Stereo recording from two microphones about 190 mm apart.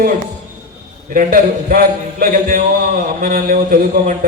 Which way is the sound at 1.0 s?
45° right (ahead or behind).